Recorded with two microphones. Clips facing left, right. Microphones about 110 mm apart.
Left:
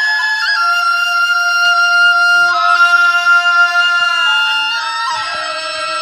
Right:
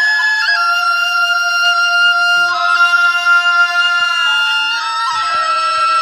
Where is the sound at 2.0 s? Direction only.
20° left (ahead or behind).